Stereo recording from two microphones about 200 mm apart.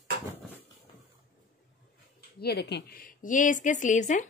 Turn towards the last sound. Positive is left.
turn(degrees=40)  # may be behind; listen again after turning